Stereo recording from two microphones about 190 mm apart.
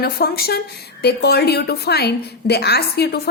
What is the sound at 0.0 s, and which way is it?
A woman's voice, 55° left (ahead or behind).